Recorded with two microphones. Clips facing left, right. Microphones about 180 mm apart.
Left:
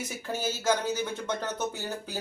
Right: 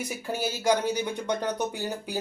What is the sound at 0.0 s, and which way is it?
Speech, 10° right (ahead or behind).